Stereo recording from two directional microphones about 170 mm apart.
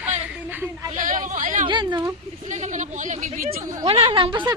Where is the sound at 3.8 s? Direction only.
35° right (ahead or behind).